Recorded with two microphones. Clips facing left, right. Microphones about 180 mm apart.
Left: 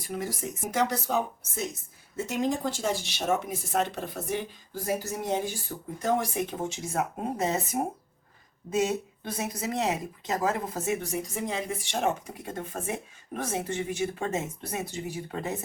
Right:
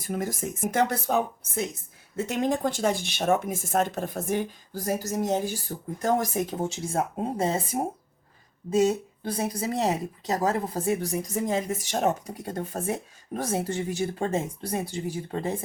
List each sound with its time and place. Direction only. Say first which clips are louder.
0.1 s a woman's voice: right 3 dB; 50° right (ahead or behind); by 7.6 s 30° right (ahead or behind)
8.7 s speech: right 4 dB; 30° right (ahead or behind)